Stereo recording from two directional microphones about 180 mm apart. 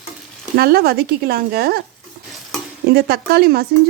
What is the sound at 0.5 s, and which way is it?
Speech, 60° right (ahead or behind).